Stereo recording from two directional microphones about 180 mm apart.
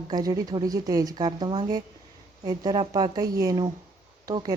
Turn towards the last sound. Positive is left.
turn(degrees=-20)  # may be behind; listen again after turning